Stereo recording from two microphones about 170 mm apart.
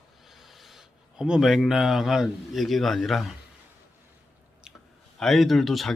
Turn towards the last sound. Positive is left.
turn(degrees=0)  # may be behind; listen again after turning